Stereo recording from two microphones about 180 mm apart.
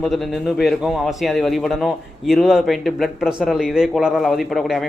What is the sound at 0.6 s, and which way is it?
A man's voice, centre (ahead or behind).